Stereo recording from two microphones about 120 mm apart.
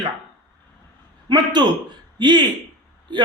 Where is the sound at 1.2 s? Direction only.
40° right (ahead or behind).